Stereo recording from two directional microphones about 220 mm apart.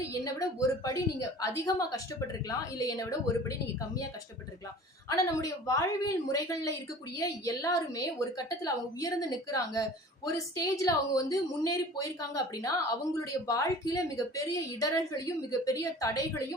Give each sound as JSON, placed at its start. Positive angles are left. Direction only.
{"t": 0.1, "sound": "a woman's voice", "side_deg": 15}
{"t": 5.0, "sound": "a woman's voice", "side_deg": 15}